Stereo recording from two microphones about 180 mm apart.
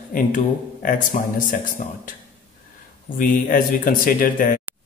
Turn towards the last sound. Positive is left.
turn(degrees=50)  # may be behind; listen again after turning